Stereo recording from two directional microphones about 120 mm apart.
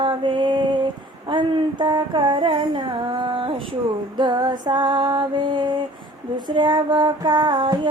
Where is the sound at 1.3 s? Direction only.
40° right (ahead or behind).